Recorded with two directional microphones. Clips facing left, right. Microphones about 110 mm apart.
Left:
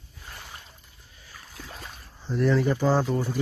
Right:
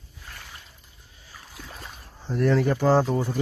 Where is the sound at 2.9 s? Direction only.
5° right (ahead or behind).